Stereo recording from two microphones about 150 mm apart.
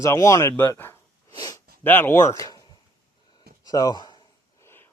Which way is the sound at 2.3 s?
25° left (ahead or behind).